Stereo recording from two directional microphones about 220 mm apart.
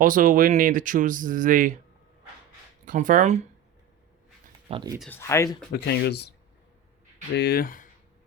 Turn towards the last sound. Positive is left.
turn(degrees=40)  # may be behind; listen again after turning